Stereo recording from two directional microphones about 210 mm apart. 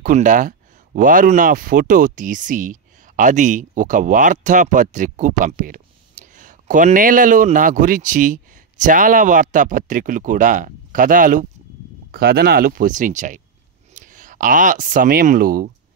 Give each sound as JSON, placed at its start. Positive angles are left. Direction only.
{"t": 0.0, "sound": "speech", "side_deg": -35}